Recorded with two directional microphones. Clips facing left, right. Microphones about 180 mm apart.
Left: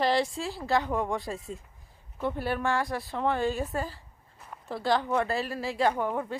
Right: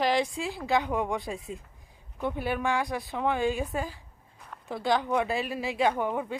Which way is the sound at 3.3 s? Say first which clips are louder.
Right 1 dB; 15° right (ahead or behind).